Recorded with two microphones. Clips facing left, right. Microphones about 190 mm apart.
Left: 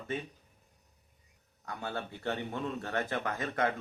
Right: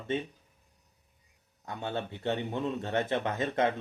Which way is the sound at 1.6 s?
25° right (ahead or behind).